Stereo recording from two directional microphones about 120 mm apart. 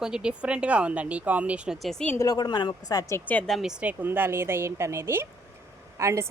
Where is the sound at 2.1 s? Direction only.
35° left (ahead or behind).